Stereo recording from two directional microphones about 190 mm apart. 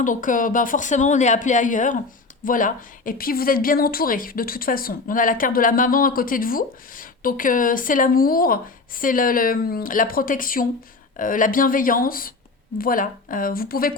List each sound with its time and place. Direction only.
0.0 s speech: 45° left (ahead or behind)